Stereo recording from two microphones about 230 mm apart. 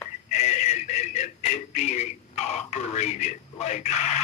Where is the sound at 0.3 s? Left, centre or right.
Left.